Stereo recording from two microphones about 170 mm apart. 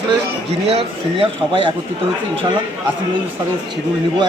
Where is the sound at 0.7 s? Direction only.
30° right (ahead or behind).